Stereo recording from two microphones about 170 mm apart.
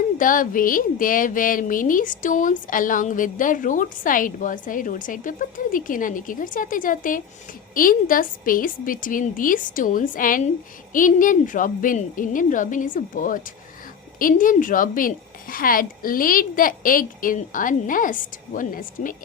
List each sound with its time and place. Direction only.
0.2 s speech: 50° left (ahead or behind)